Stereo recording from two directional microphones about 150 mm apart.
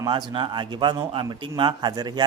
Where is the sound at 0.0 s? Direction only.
30° right (ahead or behind).